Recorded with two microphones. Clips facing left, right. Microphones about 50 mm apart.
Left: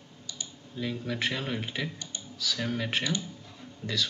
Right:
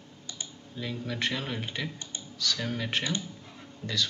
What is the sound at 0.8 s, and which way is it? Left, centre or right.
Speech, centre.